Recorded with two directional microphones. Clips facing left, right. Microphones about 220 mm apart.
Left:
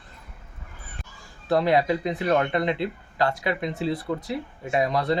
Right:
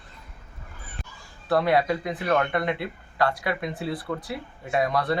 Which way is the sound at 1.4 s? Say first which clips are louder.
Left 1 dB; 20° left (ahead or behind).